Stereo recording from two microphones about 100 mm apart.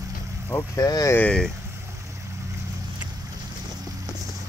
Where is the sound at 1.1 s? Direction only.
10° left (ahead or behind).